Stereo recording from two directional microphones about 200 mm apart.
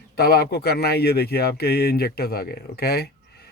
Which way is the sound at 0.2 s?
50° left (ahead or behind).